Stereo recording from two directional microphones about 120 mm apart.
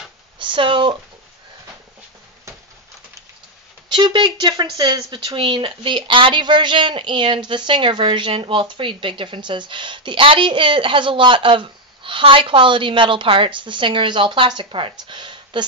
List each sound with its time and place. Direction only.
0.4 s speech: 45° right (ahead or behind)
3.9 s speech: 40° right (ahead or behind)